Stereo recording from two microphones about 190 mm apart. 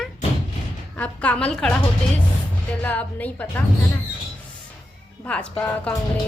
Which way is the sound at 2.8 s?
10° left (ahead or behind).